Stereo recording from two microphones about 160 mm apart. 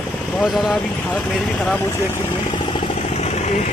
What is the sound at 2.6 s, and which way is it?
Vehicle, 30° left (ahead or behind).